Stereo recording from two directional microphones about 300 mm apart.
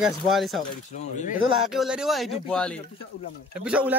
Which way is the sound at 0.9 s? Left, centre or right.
Left.